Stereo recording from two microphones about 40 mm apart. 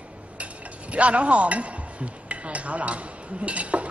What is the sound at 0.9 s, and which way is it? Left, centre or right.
Speech, right.